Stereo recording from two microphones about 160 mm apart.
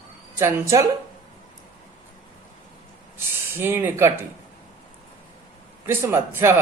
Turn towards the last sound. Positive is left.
turn(degrees=-15)  # may be behind; listen again after turning